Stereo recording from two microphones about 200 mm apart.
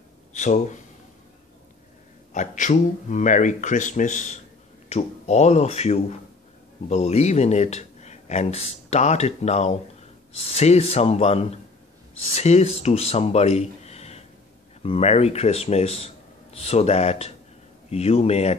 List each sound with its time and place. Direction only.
0.3 s speech: 35° left (ahead or behind)
2.3 s speech: 40° left (ahead or behind)